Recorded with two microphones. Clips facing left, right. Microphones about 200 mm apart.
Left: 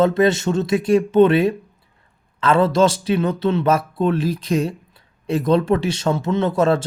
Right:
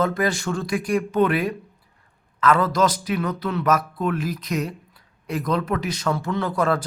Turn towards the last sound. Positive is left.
turn(degrees=25)  # may be behind; listen again after turning